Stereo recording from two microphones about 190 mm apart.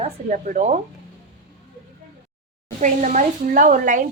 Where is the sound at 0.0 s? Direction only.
45° right (ahead or behind).